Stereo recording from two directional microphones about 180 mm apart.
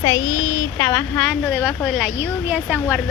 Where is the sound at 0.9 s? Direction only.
5° left (ahead or behind).